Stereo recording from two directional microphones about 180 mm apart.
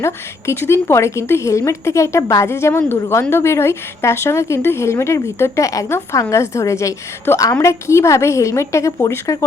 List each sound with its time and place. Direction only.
0.0 s a woman's voice: 15° left (ahead or behind)